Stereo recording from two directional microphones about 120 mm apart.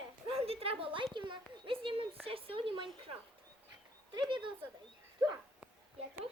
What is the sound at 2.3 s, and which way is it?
Speech, 50° right (ahead or behind).